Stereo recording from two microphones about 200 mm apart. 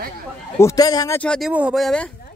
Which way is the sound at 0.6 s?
20° left (ahead or behind).